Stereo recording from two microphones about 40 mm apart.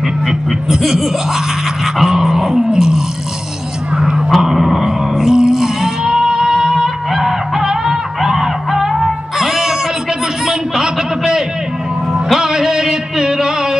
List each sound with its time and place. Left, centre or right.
0.3 s speech: centre
2.0 s vehicle: centre
2.7 s a sound: centre
7.2 s honk: centre
10.4 s a sound: centre
12.1 s music: centre